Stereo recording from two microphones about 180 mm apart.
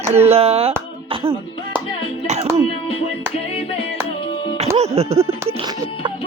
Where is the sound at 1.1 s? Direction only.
30° right (ahead or behind).